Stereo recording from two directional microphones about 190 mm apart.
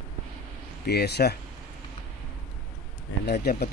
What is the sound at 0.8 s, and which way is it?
Speech, 60° left (ahead or behind).